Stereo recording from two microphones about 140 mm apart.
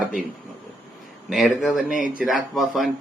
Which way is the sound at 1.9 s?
70° left (ahead or behind).